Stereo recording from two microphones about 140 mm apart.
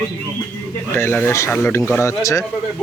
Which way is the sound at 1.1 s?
15° left (ahead or behind).